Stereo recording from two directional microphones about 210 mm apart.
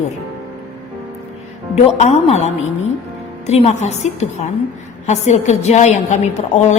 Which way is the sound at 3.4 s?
30° left (ahead or behind).